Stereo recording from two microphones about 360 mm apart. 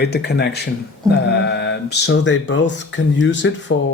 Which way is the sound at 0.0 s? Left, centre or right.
Left.